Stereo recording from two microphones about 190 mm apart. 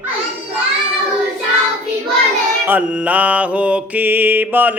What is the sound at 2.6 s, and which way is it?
Mantra, 10° right (ahead or behind).